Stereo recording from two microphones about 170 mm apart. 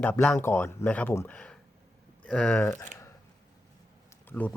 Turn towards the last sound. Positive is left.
turn(degrees=10)  # may be behind; listen again after turning